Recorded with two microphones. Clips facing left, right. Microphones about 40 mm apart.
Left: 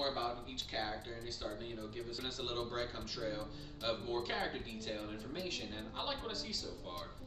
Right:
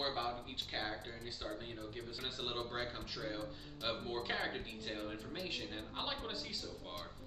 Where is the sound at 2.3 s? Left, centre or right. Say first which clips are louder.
Even; centre.